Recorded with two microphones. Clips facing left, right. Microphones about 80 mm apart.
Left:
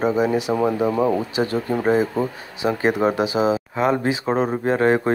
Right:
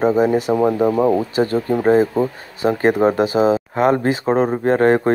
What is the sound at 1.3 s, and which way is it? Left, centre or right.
Speech, right.